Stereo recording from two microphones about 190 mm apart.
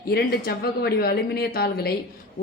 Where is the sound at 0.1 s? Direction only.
55° left (ahead or behind).